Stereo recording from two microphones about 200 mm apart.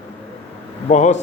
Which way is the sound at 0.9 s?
35° left (ahead or behind).